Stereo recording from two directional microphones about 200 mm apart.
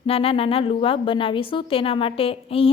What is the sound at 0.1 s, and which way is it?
A woman's voice, 30° left (ahead or behind).